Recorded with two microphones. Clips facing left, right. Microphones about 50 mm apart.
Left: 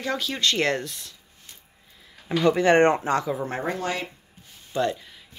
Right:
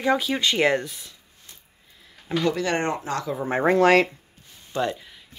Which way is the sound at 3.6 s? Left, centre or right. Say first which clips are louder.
Right 16 dB; right.